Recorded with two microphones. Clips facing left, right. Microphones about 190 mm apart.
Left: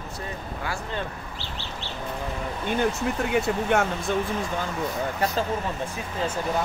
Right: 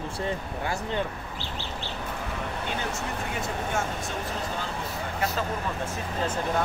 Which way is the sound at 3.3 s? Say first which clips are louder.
Left 8 dB; 65° left (ahead or behind).